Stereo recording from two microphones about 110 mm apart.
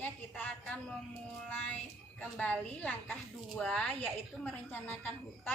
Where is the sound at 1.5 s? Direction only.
10° left (ahead or behind).